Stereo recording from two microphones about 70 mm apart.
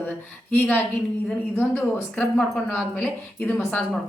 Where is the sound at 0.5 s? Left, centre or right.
Left.